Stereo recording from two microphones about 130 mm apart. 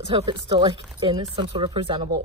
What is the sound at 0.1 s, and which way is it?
Speech, 45° right (ahead or behind).